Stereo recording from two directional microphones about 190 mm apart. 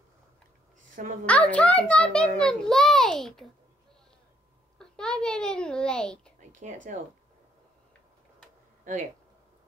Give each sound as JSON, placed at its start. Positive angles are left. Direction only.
{"t": 1.2, "sound": "a child's voice", "side_deg": 5}
{"t": 4.7, "sound": "a child's voice", "side_deg": 5}
{"t": 6.5, "sound": "speech", "side_deg": -40}
{"t": 8.9, "sound": "speech", "side_deg": -40}